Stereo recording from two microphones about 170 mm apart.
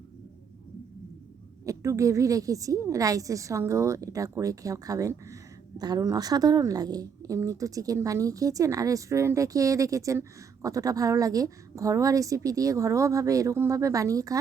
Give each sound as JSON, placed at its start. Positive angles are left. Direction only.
{"t": 1.6, "sound": "a woman's voice", "side_deg": -20}